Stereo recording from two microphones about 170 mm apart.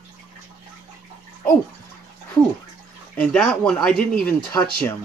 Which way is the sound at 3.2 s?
5° left (ahead or behind).